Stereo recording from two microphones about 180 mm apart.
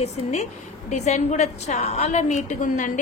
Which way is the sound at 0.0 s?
40° left (ahead or behind).